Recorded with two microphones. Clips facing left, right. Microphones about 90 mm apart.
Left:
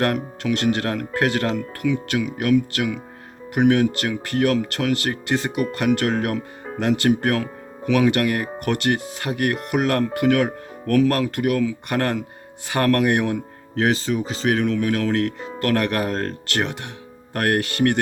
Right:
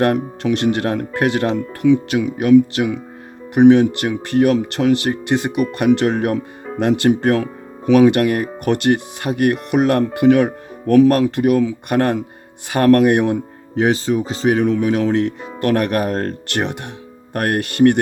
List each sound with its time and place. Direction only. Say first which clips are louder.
0.0 s speech: right 5 dB; 25° right (ahead or behind)